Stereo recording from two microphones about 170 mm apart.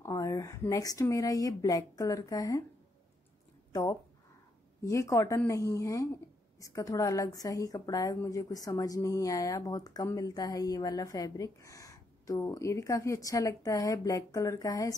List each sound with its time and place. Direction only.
0.0 s a woman's voice: 20° left (ahead or behind)
4.8 s a woman's voice: 20° left (ahead or behind)